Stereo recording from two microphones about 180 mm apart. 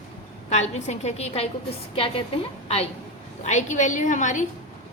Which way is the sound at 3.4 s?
40° left (ahead or behind).